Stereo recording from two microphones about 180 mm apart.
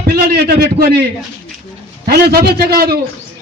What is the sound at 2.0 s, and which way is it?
Speech, 60° right (ahead or behind).